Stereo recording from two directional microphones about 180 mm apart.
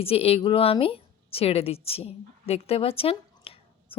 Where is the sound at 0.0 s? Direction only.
30° left (ahead or behind).